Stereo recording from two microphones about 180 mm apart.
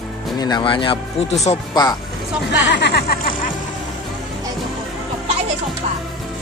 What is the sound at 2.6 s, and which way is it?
Speech, 75° left (ahead or behind).